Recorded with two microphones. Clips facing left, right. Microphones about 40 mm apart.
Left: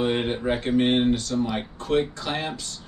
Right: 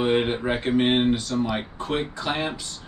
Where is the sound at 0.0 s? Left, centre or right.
Centre.